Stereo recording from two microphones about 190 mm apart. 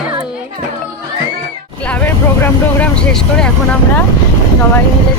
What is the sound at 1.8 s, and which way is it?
Vehicle, 10° left (ahead or behind).